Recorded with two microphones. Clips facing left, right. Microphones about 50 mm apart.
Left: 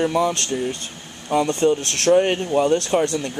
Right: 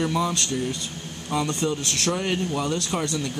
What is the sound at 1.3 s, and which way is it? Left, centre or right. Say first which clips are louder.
Speech: left 6 dB; left.